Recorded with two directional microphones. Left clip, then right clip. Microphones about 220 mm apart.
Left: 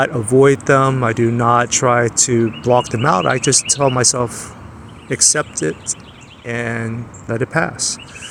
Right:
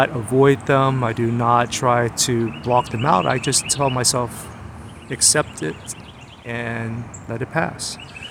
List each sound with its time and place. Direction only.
0.0 s speech: 15° left (ahead or behind)